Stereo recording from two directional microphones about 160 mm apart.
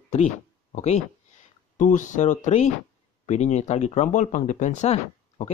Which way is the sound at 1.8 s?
50° left (ahead or behind).